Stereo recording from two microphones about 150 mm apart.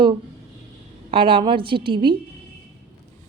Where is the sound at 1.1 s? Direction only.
35° right (ahead or behind).